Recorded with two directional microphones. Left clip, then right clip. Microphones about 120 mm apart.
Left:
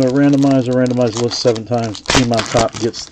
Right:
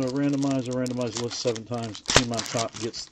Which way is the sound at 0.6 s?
15° right (ahead or behind).